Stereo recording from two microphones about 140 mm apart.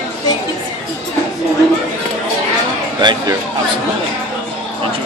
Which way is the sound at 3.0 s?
30° right (ahead or behind).